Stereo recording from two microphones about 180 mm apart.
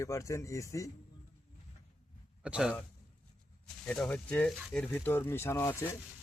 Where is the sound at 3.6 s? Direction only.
5° left (ahead or behind).